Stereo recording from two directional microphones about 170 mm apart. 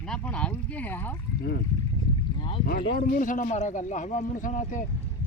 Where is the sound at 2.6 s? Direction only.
60° left (ahead or behind); by 4.8 s 45° left (ahead or behind).